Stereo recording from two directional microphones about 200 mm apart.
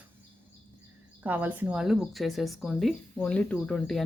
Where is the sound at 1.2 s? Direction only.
10° right (ahead or behind).